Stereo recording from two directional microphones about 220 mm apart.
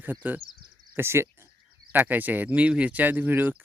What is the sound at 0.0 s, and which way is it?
Speech, 10° right (ahead or behind).